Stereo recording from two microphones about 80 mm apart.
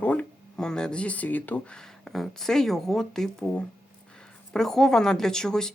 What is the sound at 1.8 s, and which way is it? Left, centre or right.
Speech, centre.